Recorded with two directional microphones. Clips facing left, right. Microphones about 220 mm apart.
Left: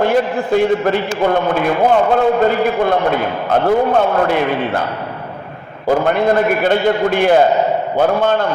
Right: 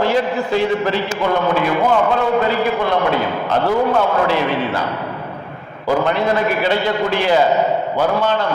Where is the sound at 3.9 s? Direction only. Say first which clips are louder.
Left 2 dB; 55° left (ahead or behind).